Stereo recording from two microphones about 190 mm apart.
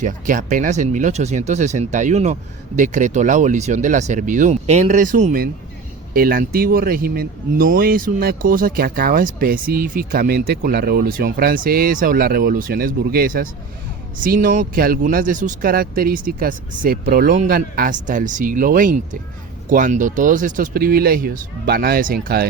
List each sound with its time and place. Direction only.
0.0 s speech: 45° right (ahead or behind)